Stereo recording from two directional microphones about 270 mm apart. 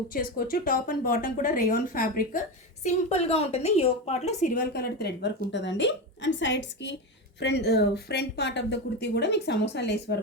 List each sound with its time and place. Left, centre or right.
0.1 s a woman's voice: left